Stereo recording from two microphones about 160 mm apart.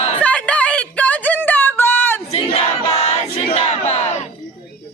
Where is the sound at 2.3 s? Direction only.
40° left (ahead or behind).